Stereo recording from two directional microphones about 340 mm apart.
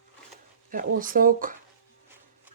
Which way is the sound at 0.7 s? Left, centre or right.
Right.